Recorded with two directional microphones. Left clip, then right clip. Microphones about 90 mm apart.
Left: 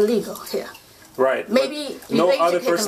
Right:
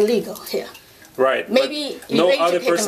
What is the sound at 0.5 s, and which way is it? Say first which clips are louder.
Speech: right 2 dB; 40° right (ahead or behind).